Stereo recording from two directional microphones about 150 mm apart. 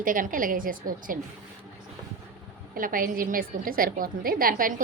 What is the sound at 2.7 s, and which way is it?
A woman's voice, 70° right (ahead or behind).